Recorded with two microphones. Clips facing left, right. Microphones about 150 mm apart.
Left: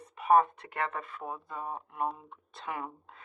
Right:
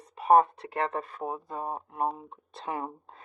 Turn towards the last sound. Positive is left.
turn(degrees=-35)  # may be behind; listen again after turning